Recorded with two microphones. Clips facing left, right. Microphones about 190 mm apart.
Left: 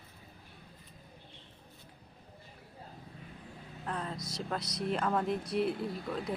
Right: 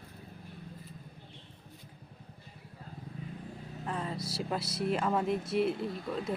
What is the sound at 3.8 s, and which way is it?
Vehicle, 5° right (ahead or behind).